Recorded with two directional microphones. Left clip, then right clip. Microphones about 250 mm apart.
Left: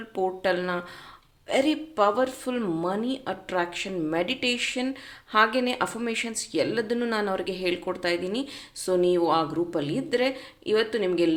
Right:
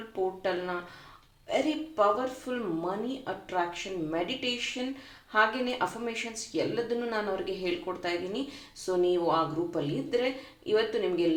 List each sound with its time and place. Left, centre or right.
0.4 s speech: left